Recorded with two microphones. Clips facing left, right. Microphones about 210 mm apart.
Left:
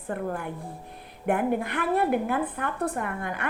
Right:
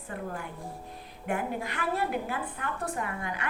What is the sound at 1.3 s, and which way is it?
A woman's voice, 55° left (ahead or behind).